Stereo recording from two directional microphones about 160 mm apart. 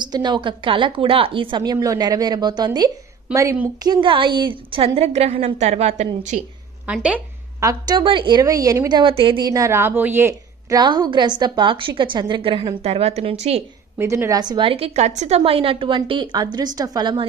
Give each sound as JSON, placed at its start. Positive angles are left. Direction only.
{"t": 0.0, "sound": "a woman's voice", "side_deg": -25}
{"t": 3.9, "sound": "a woman's voice", "side_deg": -30}
{"t": 6.9, "sound": "a woman's voice", "side_deg": -10}
{"t": 7.6, "sound": "a woman's voice", "side_deg": -25}
{"t": 9.5, "sound": "a woman's voice", "side_deg": -20}
{"t": 10.8, "sound": "a woman's voice", "side_deg": -30}
{"t": 13.9, "sound": "a woman's voice", "side_deg": -15}
{"t": 14.4, "sound": "a woman's voice", "side_deg": -30}